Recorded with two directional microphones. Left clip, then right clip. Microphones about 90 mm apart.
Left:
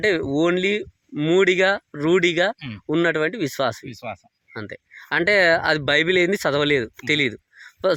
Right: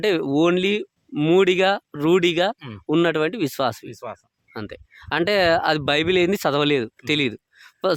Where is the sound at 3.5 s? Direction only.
35° right (ahead or behind).